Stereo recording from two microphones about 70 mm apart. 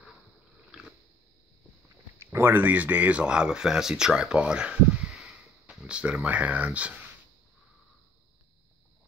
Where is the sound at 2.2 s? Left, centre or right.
Right; by 5.2 s centre.